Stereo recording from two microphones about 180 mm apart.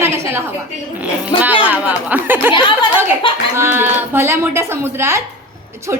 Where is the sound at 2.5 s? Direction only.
25° left (ahead or behind).